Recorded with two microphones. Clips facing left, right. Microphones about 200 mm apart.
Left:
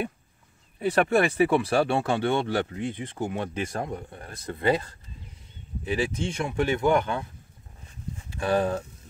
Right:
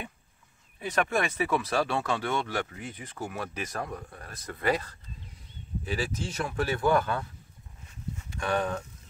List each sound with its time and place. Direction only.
0.7 s speech: 35° left (ahead or behind)
8.3 s speech: 30° left (ahead or behind)